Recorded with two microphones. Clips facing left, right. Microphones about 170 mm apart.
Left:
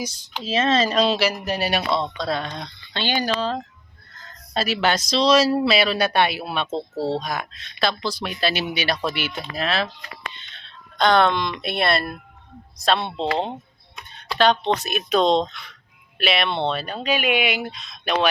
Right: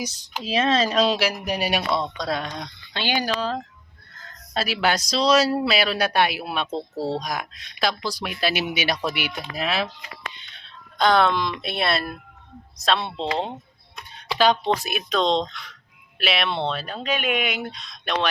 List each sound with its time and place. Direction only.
0.0 s speech: 5° right (ahead or behind)
14.3 s speech: 10° right (ahead or behind)
15.1 s speech: 10° left (ahead or behind)